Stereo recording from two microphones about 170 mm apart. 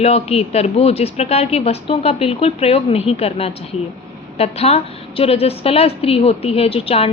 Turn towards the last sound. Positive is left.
turn(degrees=35)  # may be behind; listen again after turning